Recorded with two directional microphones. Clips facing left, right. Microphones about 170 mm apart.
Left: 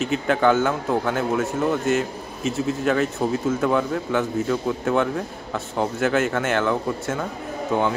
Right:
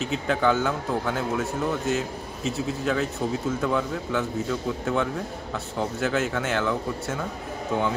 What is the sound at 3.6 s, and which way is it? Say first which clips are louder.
A man's voice: left 4 dB; 65° left (ahead or behind).